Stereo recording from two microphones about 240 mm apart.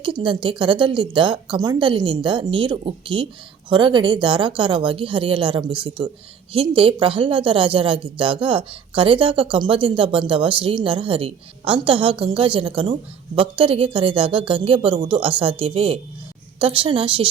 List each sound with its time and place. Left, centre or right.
0.0 s a woman's voice: centre